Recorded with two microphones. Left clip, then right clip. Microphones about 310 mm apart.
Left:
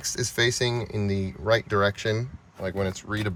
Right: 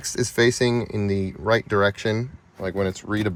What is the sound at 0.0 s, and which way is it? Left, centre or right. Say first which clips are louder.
Speech: right 4 dB; centre.